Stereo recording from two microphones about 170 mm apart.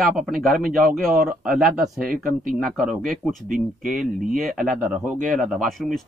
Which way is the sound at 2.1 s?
55° right (ahead or behind).